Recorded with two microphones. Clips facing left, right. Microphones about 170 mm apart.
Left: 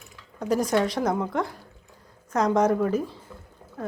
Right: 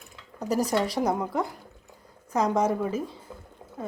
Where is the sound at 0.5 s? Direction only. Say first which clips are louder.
Left 2 dB; 5° right (ahead or behind).